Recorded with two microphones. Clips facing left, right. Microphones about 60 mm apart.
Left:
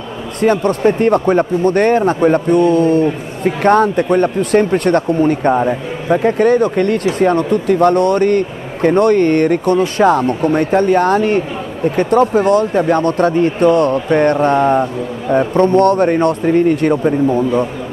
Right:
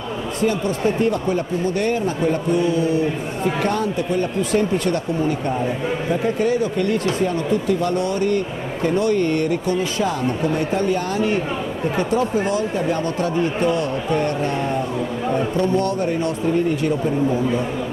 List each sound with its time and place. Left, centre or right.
0.4 s speech: left